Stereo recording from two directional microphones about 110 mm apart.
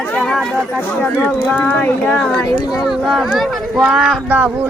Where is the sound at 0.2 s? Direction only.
5° left (ahead or behind).